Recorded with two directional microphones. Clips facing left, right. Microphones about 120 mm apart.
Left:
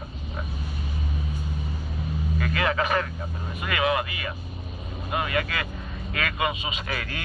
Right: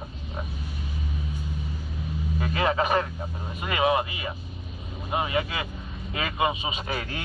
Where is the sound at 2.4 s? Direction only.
25° right (ahead or behind).